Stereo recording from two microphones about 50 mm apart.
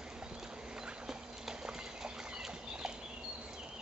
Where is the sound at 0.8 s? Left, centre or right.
Centre.